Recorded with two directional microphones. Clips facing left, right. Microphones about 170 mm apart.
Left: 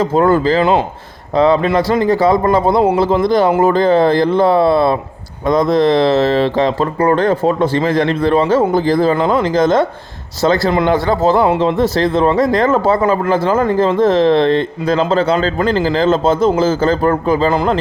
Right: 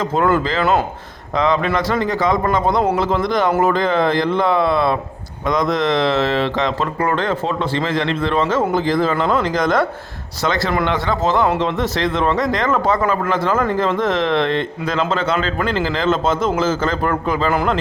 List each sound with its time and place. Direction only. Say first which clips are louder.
0.2 s speech: left 5 dB; 35° left (ahead or behind)